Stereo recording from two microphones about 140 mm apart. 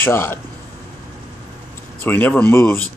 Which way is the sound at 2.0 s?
15° left (ahead or behind).